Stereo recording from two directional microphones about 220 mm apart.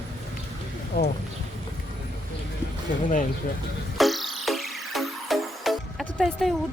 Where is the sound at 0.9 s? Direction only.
45° left (ahead or behind).